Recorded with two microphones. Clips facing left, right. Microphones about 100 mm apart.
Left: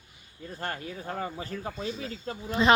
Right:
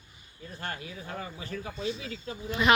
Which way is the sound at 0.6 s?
40° left (ahead or behind).